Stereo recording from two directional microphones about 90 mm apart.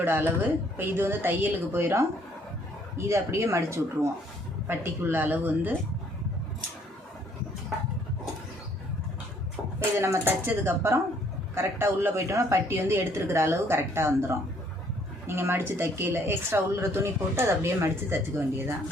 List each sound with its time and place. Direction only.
0.0 s speech: 20° right (ahead or behind)
3.1 s speech: 30° right (ahead or behind)
10.0 s speech: 25° right (ahead or behind)